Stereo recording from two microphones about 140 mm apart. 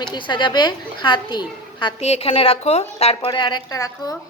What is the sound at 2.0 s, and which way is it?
A woman's voice, 50° left (ahead or behind).